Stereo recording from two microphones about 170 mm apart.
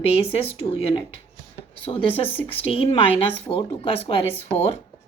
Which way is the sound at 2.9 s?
35° left (ahead or behind).